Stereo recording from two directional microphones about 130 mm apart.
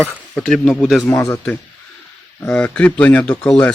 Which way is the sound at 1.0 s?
20° left (ahead or behind).